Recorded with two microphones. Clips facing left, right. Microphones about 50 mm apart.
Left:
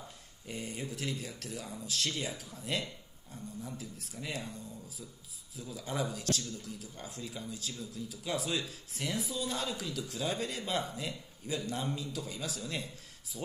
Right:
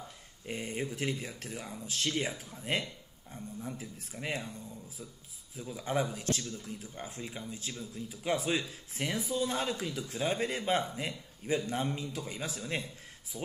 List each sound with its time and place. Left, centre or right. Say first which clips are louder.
0.5 s speech: right 4 dB; right
5.6 s speech: right 4 dB; right